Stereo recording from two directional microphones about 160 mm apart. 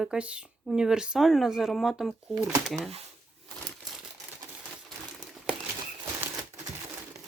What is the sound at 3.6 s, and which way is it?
Crumpling, centre (ahead or behind).